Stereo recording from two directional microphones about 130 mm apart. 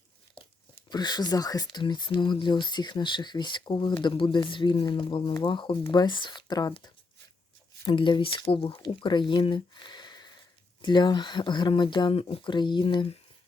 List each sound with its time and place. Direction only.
0.9 s speech: 35° left (ahead or behind)